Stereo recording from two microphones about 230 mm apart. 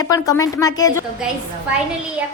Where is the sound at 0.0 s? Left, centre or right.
Centre.